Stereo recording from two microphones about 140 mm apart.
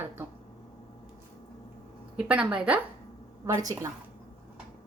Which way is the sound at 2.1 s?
10° right (ahead or behind).